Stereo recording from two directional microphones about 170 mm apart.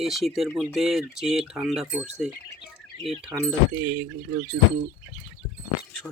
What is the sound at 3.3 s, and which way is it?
Speech, 15° right (ahead or behind).